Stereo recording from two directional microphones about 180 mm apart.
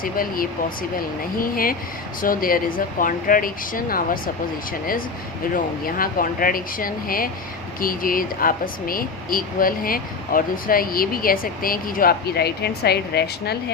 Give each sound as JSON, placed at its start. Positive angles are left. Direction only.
{"t": 0.0, "sound": "speech", "side_deg": 55}
{"t": 5.8, "sound": "speech", "side_deg": 50}